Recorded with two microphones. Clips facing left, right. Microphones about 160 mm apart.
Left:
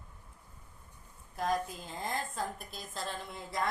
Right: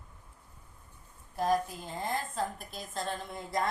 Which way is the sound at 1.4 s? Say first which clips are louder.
Right 4 dB; centre (ahead or behind).